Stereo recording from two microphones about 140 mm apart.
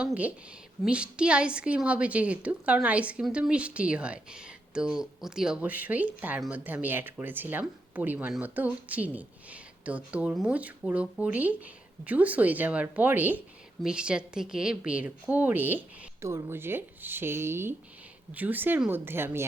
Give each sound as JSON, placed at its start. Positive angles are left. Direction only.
{"t": 0.0, "sound": "a woman's voice", "side_deg": -10}